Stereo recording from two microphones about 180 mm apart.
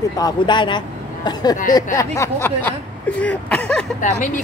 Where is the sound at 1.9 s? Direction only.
15° left (ahead or behind).